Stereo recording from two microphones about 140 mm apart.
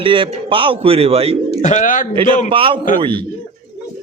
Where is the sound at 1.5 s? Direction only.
55° left (ahead or behind); by 2.1 s 70° left (ahead or behind).